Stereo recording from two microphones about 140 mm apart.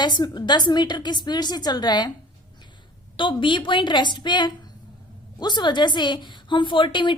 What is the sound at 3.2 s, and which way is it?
Speech, 35° left (ahead or behind).